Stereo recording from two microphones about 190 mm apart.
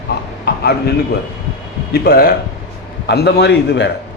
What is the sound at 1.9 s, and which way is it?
Speech, 55° left (ahead or behind).